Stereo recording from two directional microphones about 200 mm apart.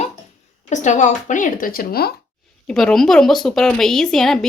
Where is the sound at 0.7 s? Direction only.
35° left (ahead or behind).